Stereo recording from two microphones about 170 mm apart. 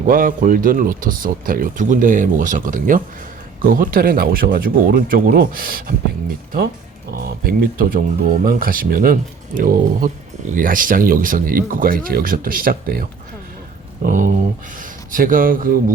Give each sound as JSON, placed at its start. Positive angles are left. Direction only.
{"t": 0.1, "sound": "speech", "side_deg": -55}
{"t": 7.2, "sound": "speech", "side_deg": -60}